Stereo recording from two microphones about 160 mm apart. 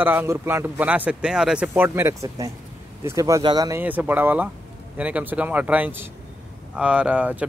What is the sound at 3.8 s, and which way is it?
Speech, 10° right (ahead or behind).